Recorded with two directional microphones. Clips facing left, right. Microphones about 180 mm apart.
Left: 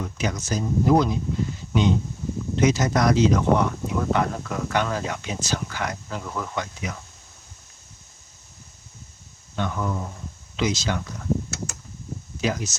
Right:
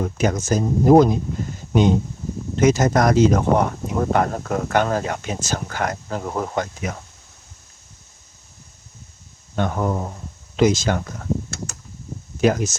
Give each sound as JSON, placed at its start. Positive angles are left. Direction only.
{"t": 0.0, "sound": "speech", "side_deg": -50}
{"t": 9.6, "sound": "speech", "side_deg": -50}
{"t": 12.4, "sound": "speech", "side_deg": -50}